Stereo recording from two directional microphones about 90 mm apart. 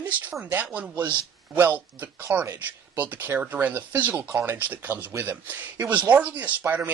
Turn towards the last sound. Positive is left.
turn(degrees=-20)  # may be behind; listen again after turning